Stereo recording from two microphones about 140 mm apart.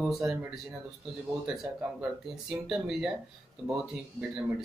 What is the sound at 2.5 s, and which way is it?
Speech, centre (ahead or behind).